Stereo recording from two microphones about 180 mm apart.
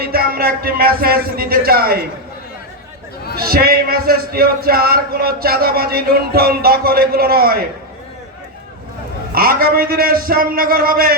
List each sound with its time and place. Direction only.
0.0 s speech: 55° right (ahead or behind)
3.3 s speech: 55° right (ahead or behind)
9.3 s speech: 55° right (ahead or behind)